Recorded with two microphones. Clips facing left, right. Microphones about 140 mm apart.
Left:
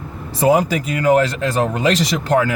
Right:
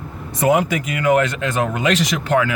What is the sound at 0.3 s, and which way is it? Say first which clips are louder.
Speech: left 2 dB; 30° left (ahead or behind).